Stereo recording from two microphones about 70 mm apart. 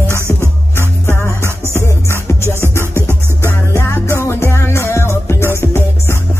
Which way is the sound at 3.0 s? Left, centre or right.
Right.